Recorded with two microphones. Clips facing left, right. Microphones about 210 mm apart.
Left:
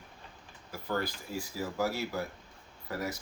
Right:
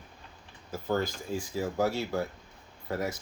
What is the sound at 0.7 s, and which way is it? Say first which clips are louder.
Speech: right 4 dB; 20° right (ahead or behind).